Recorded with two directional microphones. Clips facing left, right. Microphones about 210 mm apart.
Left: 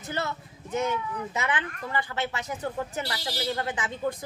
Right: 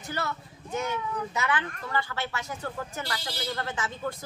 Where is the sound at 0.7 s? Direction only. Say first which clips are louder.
Left 2 dB; 25° left (ahead or behind).